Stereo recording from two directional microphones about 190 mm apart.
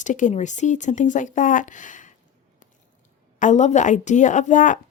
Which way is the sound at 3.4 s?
40° left (ahead or behind).